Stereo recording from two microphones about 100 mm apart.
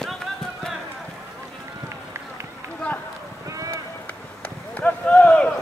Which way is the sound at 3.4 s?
35° right (ahead or behind).